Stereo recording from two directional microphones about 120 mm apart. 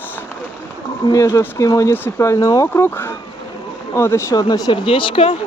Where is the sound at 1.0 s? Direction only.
30° left (ahead or behind).